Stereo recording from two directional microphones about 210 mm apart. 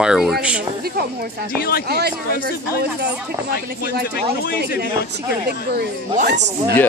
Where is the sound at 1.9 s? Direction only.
50° right (ahead or behind).